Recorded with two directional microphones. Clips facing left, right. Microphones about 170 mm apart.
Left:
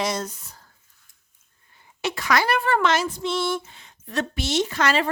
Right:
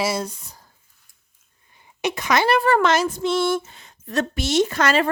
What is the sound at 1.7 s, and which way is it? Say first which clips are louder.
Speech: right 3 dB; 15° right (ahead or behind).